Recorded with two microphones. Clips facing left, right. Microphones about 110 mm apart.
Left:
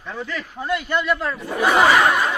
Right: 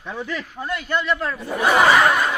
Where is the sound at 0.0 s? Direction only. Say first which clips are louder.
Right 1 dB; 10° right (ahead or behind).